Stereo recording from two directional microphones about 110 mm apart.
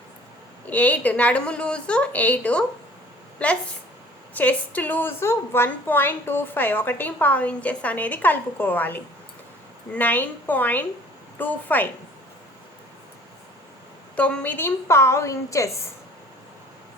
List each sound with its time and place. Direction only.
0.7 s a woman's voice: 15° left (ahead or behind)
14.2 s a woman's voice: 15° left (ahead or behind)